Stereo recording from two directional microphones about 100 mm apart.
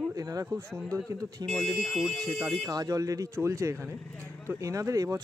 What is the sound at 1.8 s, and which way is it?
Speech, 5° left (ahead or behind).